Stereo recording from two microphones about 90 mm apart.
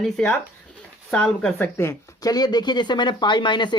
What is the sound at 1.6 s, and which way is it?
Speech, 25° left (ahead or behind).